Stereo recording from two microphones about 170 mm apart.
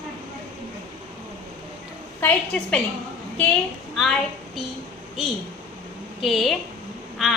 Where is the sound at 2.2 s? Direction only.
10° left (ahead or behind).